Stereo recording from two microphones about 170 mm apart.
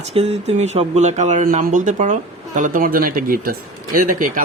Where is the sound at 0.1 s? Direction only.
35° right (ahead or behind).